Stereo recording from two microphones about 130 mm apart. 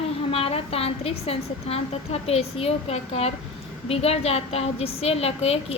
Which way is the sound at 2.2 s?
50° left (ahead or behind).